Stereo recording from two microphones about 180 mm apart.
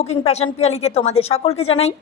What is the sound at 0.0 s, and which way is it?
A woman's voice, 35° left (ahead or behind).